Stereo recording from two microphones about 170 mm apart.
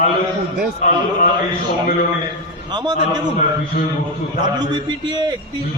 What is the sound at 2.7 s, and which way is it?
Speech, 25° right (ahead or behind).